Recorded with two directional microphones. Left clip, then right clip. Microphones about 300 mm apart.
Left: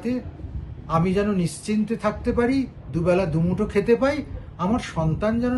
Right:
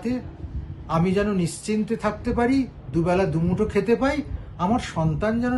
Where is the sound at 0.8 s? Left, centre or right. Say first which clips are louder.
Left 1 dB; centre.